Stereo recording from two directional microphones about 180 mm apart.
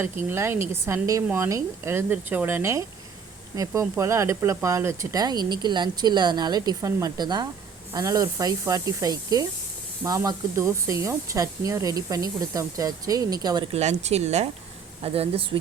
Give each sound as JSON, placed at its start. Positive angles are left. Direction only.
{"t": 0.0, "sound": "a woman's voice", "side_deg": -15}
{"t": 13.7, "sound": "speech", "side_deg": -35}